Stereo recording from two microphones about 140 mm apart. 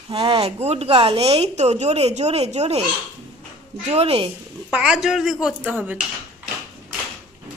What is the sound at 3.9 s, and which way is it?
Speech, 45° right (ahead or behind).